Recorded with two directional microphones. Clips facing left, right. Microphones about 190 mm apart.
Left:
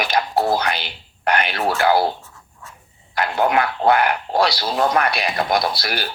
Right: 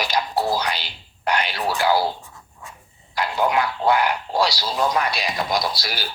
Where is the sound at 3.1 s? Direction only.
60° left (ahead or behind).